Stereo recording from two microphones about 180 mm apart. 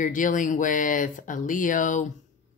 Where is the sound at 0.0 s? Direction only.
45° left (ahead or behind).